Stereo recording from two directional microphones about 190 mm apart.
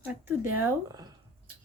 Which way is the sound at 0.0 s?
10° right (ahead or behind).